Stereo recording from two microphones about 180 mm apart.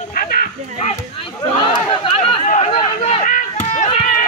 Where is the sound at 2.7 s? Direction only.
35° left (ahead or behind).